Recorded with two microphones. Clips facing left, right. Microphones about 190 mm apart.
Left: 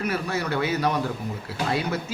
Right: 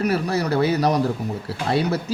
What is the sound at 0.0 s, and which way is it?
Speech, 35° right (ahead or behind).